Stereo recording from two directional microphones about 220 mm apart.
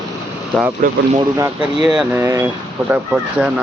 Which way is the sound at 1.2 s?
15° right (ahead or behind).